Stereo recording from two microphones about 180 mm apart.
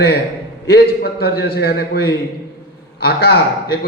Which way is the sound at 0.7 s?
65° left (ahead or behind).